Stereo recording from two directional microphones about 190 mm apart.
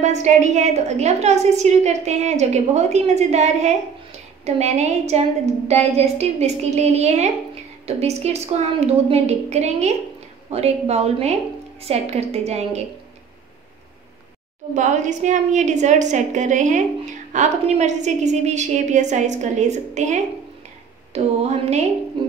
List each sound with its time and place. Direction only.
0.0 s a woman's voice: 40° right (ahead or behind)
14.7 s a woman's voice: 40° right (ahead or behind)